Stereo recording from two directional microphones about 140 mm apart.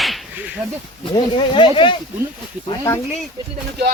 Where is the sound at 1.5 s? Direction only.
35° left (ahead or behind).